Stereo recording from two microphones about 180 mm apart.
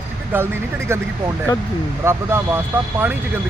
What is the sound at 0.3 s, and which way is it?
Speech, 10° right (ahead or behind).